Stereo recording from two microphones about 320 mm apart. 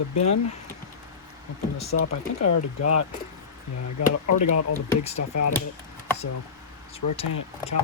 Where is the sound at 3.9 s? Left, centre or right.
Left.